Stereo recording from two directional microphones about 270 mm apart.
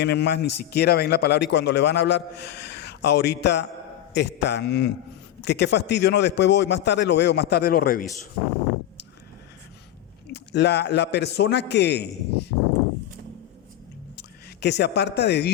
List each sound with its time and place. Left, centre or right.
0.0 s a man's voice: left
10.3 s a man's voice: left
14.2 s speech: left